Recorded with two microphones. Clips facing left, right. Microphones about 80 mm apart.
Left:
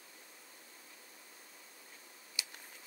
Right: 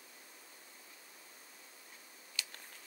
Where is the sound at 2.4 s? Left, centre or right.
Centre.